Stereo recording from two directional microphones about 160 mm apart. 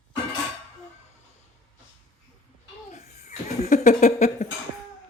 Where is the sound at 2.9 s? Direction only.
45° left (ahead or behind).